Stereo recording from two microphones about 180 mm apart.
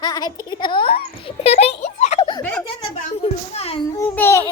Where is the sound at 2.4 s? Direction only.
10° left (ahead or behind).